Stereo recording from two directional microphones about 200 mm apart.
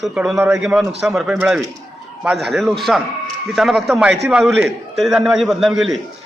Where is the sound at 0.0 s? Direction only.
5° right (ahead or behind).